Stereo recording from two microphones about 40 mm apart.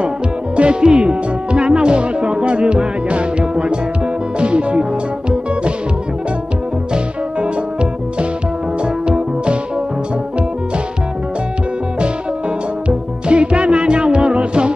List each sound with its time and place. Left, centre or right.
0.6 s speech: right
4.4 s music: right
9.0 s music: right
12.8 s music: right